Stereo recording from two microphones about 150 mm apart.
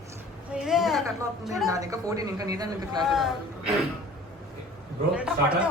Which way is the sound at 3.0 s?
Centre (ahead or behind).